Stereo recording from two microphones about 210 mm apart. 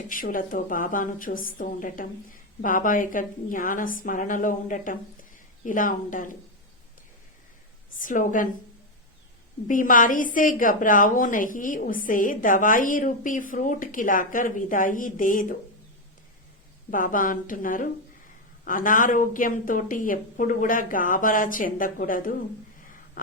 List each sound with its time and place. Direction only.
0.1 s a woman's voice: 40° left (ahead or behind)
7.9 s a woman's voice: 40° left (ahead or behind)
9.6 s a woman's voice: 40° left (ahead or behind)
16.9 s a woman's voice: 40° left (ahead or behind)